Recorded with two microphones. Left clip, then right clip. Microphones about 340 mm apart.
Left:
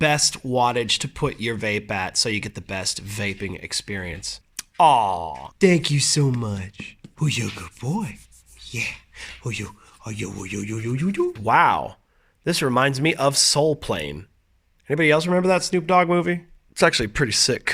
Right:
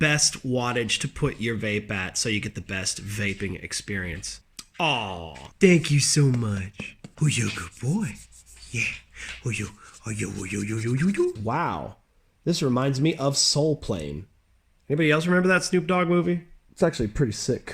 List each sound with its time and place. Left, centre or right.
0.0 s speech: centre
11.4 s speech: left
17.0 s speech: left